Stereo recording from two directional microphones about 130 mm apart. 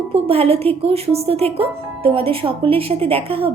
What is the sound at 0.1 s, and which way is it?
Speech, 50° right (ahead or behind).